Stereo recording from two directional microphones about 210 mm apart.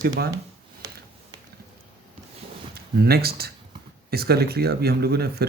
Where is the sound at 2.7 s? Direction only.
50° right (ahead or behind).